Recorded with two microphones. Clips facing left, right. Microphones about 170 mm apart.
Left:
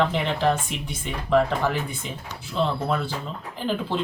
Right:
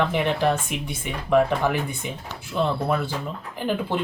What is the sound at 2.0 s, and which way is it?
Speech, 60° right (ahead or behind).